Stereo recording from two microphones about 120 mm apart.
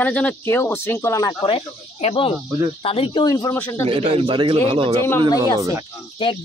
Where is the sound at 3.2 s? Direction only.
35° left (ahead or behind).